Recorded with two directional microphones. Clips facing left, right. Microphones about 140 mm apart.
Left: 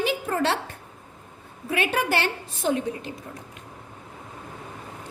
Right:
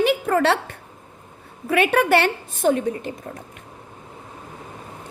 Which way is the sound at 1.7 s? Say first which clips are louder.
Right 7 dB; 60° right (ahead or behind).